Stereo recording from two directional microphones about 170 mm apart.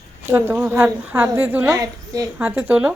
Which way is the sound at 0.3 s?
10° right (ahead or behind).